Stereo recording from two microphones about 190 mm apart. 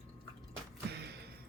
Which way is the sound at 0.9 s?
60° right (ahead or behind).